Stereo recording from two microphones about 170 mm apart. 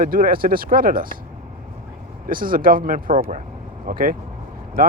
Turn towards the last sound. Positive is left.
turn(degrees=-55)  # may be behind; listen again after turning